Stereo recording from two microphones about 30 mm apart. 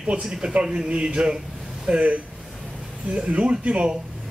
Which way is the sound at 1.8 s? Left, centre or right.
Right.